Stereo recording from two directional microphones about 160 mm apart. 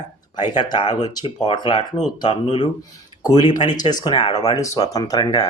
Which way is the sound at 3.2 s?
25° left (ahead or behind).